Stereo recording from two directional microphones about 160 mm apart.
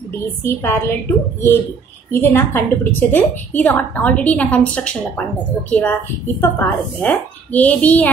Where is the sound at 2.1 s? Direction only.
15° left (ahead or behind).